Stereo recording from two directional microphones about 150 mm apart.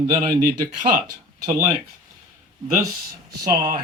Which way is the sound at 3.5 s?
30° right (ahead or behind).